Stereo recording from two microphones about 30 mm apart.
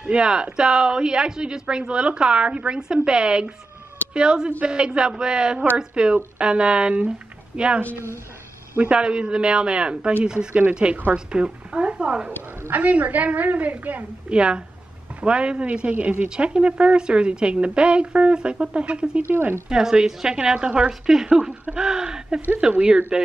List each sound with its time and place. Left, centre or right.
0.0 s a woman's voice: right
8.9 s a woman's voice: right
11.7 s a woman's voice: right
12.7 s a woman's voice: right
14.3 s a woman's voice: right
15.8 s a woman's voice: right
16.3 s a woman's voice: right
19.7 s a woman's voice: right
20.5 s a woman's voice: right
22.7 s a woman's voice: right